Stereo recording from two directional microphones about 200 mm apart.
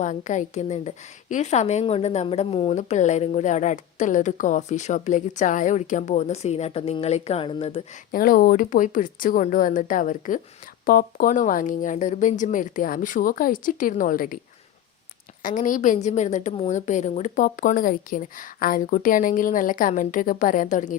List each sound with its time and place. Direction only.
0.0 s a woman's voice: 35° left (ahead or behind)
8.1 s a woman's voice: 45° left (ahead or behind)
15.4 s a woman's voice: 40° left (ahead or behind)